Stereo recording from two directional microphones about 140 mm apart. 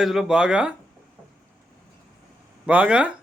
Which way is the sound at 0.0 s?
5° right (ahead or behind).